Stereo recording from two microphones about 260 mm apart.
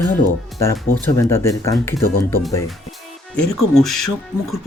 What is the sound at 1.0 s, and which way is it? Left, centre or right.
Speech, centre.